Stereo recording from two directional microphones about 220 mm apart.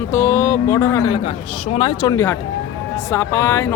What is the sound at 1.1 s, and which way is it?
A man's voice, 25° left (ahead or behind).